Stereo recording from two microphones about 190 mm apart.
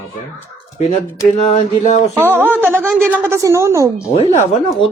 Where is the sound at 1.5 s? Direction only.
35° left (ahead or behind).